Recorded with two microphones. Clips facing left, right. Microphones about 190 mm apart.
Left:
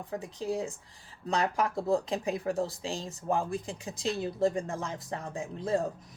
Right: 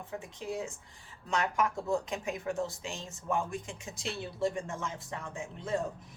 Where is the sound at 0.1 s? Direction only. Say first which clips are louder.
Left 5 dB; 35° left (ahead or behind).